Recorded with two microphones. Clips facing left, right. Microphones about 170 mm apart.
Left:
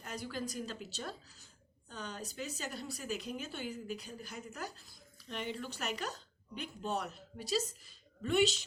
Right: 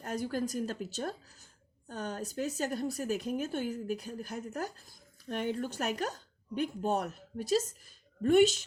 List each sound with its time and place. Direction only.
0.0 s speech: 50° right (ahead or behind)